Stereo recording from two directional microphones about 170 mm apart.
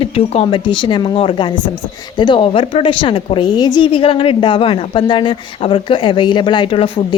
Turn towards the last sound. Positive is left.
turn(degrees=30)  # may be behind; listen again after turning